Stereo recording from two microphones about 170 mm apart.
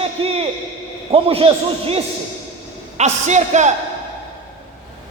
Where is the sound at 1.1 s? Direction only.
35° right (ahead or behind).